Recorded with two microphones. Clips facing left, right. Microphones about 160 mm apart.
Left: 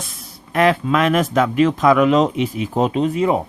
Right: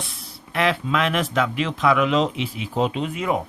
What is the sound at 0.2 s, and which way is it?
Speech, 45° left (ahead or behind).